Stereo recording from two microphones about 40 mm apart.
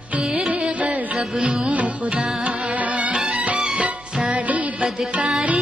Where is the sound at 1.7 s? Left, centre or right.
Right.